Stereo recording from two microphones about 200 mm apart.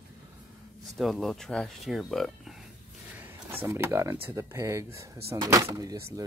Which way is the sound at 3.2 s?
10° right (ahead or behind).